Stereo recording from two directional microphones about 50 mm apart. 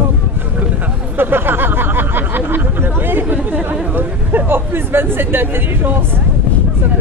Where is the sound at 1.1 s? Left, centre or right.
Right.